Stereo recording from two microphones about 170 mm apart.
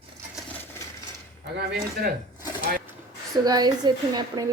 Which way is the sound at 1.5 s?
70° right (ahead or behind).